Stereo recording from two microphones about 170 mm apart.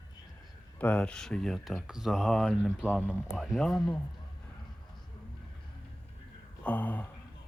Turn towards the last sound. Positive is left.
turn(degrees=10)  # may be behind; listen again after turning